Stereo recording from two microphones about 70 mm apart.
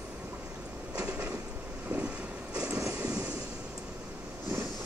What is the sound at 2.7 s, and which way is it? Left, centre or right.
Vehicle, right.